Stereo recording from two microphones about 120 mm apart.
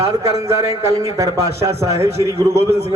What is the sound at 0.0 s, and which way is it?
A man's voice, 25° right (ahead or behind).